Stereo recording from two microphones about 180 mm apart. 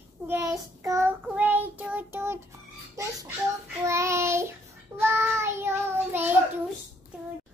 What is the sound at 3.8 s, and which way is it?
Child singing, 15° right (ahead or behind).